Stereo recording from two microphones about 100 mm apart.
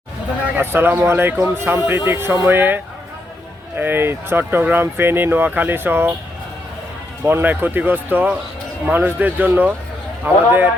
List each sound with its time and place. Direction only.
0.5 s speech: 20° right (ahead or behind)
7.3 s speech: 20° right (ahead or behind)